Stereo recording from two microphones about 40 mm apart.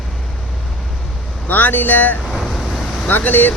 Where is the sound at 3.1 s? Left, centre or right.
Left.